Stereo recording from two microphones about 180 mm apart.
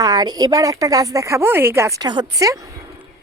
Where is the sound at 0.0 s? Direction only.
20° right (ahead or behind).